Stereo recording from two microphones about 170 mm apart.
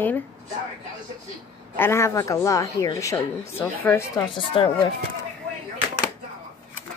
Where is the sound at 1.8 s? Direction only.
15° left (ahead or behind).